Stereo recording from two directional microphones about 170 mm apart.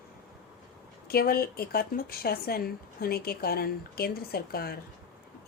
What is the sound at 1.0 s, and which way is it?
Speech, 65° left (ahead or behind).